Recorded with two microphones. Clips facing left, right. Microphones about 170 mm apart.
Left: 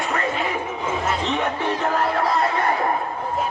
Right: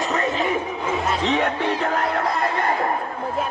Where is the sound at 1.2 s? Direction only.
60° right (ahead or behind).